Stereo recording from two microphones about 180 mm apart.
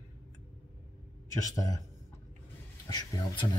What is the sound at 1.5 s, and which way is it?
Speech, 20° left (ahead or behind).